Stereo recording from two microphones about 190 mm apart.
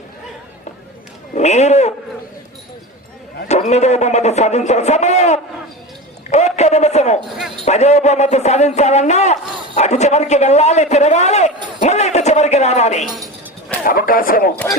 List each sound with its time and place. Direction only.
1.4 s a sound: 35° left (ahead or behind)
3.5 s a man's voice: 35° left (ahead or behind)
6.3 s a sound: 35° left (ahead or behind)
7.3 s basketball bounce: centre (ahead or behind)
7.6 s a man's voice: 35° left (ahead or behind)
13.1 s a woman's voice: 20° right (ahead or behind)
13.8 s speech: 50° left (ahead or behind)